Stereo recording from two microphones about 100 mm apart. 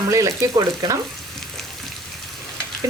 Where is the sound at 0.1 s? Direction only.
30° right (ahead or behind).